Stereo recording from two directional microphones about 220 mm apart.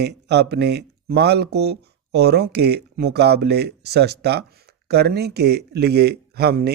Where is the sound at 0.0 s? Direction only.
50° right (ahead or behind).